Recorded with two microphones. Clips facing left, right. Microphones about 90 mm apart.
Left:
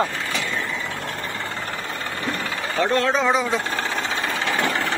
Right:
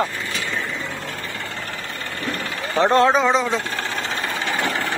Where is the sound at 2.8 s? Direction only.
30° right (ahead or behind).